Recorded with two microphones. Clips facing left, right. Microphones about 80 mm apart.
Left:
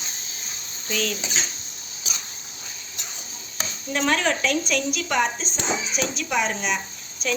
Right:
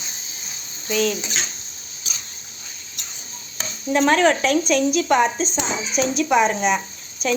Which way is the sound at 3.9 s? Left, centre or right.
Right.